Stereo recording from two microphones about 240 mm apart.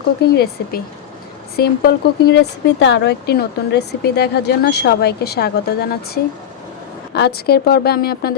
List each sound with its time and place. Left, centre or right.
0.2 s a woman's voice: left
7.1 s a woman's voice: left